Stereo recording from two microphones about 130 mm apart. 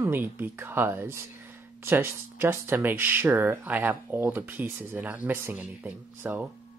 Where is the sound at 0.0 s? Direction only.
15° right (ahead or behind).